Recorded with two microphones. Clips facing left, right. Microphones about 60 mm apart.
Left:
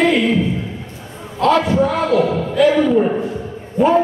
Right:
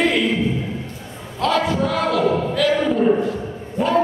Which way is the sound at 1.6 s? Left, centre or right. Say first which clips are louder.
Left 4 dB; left.